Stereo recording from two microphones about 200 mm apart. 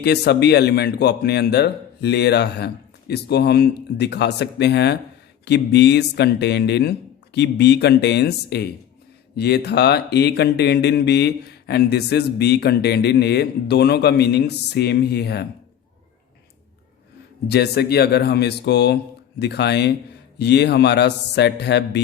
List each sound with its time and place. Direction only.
0.0 s speech: 55° left (ahead or behind)
17.5 s speech: 55° left (ahead or behind)